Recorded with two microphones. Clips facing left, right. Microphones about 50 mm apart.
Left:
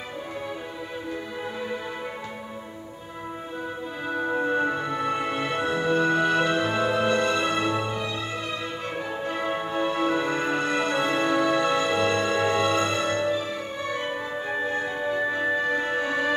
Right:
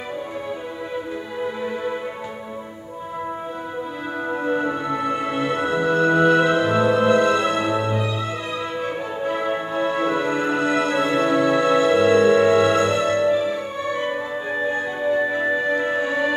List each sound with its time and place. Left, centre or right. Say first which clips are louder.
4.2 s music: right 2 dB; centre
5.6 s music: right 3 dB; centre